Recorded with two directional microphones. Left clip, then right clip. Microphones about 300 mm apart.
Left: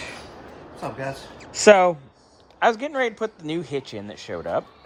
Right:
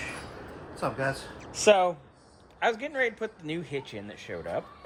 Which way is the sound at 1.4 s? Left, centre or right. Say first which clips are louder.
Left 8 dB; left.